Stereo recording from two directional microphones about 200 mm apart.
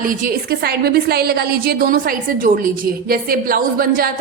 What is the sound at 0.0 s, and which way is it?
A woman's voice, 45° right (ahead or behind).